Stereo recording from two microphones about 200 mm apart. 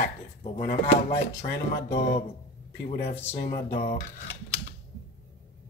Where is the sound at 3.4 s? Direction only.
50° left (ahead or behind).